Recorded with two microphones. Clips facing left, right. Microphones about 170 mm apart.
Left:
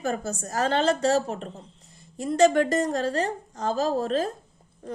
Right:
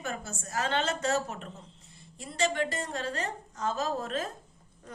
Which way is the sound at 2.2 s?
45° left (ahead or behind).